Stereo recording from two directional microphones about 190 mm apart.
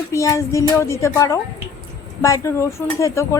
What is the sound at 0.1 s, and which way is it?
A woman's voice, 15° left (ahead or behind).